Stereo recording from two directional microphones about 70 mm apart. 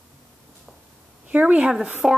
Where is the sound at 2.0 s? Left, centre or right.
Centre.